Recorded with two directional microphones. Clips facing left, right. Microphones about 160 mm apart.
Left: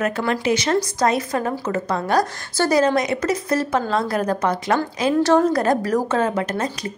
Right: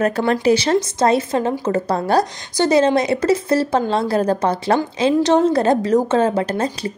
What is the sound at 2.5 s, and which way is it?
A woman's voice, 20° right (ahead or behind).